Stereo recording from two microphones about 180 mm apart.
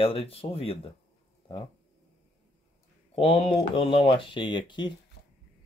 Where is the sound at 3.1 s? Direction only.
35° left (ahead or behind).